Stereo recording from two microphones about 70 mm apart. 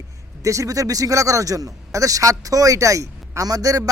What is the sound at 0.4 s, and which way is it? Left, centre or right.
A man's voice, right.